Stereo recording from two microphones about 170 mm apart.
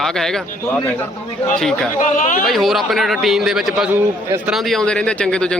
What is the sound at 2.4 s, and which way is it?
Speech, centre (ahead or behind).